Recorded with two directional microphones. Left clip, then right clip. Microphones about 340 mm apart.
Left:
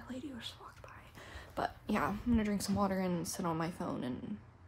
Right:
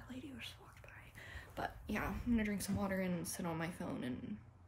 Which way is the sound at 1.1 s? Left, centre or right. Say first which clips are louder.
Left 6 dB; centre.